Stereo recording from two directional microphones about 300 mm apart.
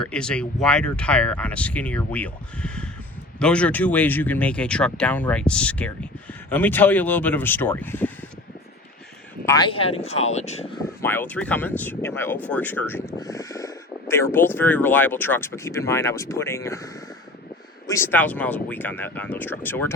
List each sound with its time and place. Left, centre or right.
0.0 s speech: centre
9.5 s speech: centre
11.0 s speech: centre